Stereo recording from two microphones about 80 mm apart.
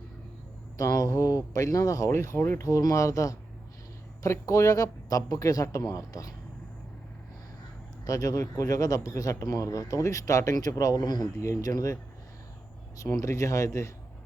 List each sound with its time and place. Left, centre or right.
0.8 s speech: left
2.6 s speech: left
8.0 s speech: left
11.3 s speech: left
13.0 s speech: left